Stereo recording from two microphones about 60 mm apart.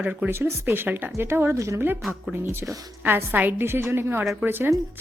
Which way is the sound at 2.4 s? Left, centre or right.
Right.